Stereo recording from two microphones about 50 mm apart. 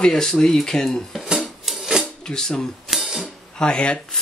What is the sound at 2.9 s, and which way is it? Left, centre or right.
Music, centre.